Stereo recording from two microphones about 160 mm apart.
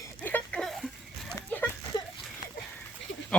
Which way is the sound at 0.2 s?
10° left (ahead or behind).